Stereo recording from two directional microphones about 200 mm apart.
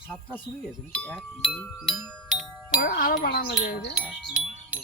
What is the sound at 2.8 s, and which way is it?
A child's voice, 45° left (ahead or behind).